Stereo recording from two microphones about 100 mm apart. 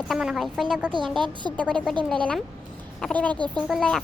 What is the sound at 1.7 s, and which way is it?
Speech, 10° left (ahead or behind).